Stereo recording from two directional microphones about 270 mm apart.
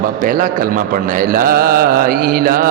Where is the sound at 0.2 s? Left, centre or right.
Right.